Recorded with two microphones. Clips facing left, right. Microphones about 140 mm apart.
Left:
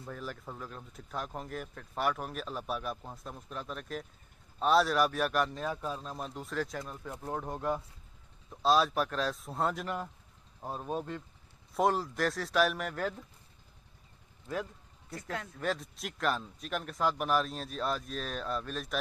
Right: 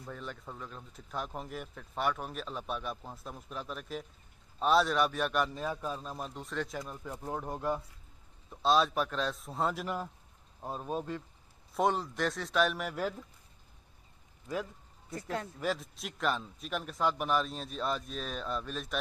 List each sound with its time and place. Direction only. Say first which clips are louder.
0.0 s speech: left 1 dB; centre (ahead or behind)
15.6 s speech: even; centre (ahead or behind)